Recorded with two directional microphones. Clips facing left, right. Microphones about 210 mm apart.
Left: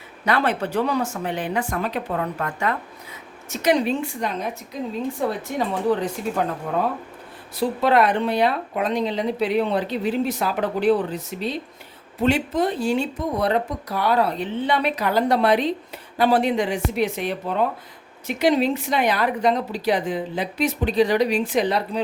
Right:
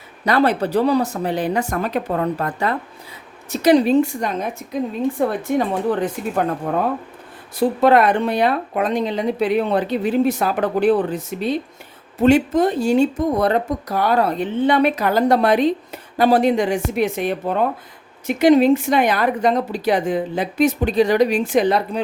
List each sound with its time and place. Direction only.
0.3 s speech: 40° right (ahead or behind)
5.2 s speech: 55° right (ahead or behind)